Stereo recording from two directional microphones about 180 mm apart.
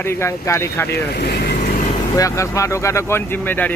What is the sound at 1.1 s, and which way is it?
Speech, 60° left (ahead or behind).